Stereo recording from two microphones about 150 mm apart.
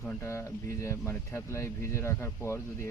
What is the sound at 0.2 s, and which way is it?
Speech, 20° left (ahead or behind).